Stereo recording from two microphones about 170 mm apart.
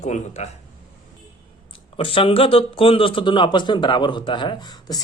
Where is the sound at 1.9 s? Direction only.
35° left (ahead or behind).